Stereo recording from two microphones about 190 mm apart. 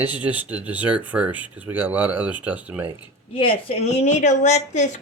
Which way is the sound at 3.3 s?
30° left (ahead or behind).